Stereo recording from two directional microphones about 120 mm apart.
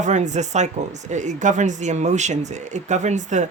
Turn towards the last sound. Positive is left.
turn(degrees=-90)